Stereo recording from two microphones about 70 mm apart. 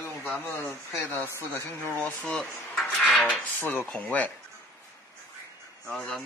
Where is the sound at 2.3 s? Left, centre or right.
Centre.